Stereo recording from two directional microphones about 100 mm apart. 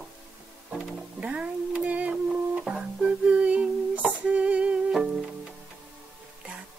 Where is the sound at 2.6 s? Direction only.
5° right (ahead or behind).